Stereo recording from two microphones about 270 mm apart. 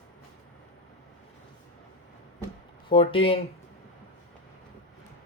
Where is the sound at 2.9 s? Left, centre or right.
Centre.